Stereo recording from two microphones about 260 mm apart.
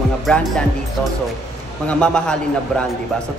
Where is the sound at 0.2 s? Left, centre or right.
Centre.